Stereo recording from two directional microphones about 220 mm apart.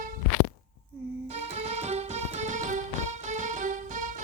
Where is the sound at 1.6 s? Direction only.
30° right (ahead or behind).